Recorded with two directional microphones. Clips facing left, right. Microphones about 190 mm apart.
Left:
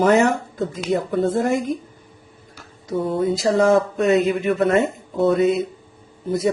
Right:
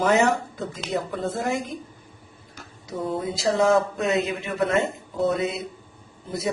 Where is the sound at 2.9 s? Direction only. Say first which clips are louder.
Left 7 dB; 50° left (ahead or behind).